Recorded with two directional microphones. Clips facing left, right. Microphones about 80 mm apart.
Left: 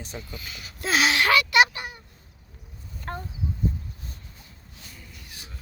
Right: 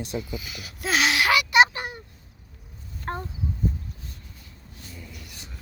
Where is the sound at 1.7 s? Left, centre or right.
Right.